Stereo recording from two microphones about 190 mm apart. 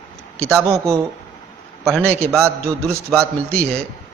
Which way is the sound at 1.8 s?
Centre (ahead or behind).